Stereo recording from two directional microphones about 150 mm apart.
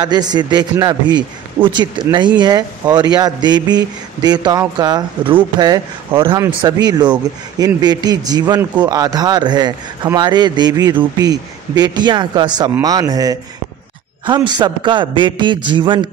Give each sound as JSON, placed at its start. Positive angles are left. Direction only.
{"t": 0.0, "sound": "a man's voice", "side_deg": -30}